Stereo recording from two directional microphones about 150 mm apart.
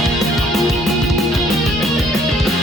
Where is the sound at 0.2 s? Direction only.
Centre (ahead or behind).